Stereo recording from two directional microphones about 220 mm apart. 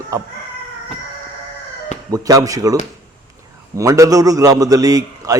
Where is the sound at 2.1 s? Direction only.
15° right (ahead or behind).